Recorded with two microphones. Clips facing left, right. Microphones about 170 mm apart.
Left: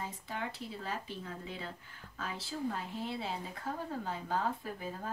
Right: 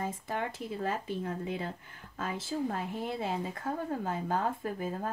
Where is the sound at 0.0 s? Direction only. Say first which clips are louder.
Right 6 dB; 50° right (ahead or behind).